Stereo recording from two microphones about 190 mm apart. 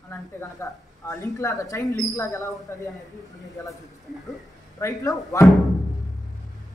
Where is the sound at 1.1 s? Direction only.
15° left (ahead or behind).